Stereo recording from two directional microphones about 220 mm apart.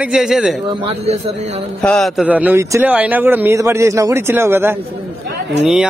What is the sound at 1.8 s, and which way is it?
A man's voice, centre (ahead or behind).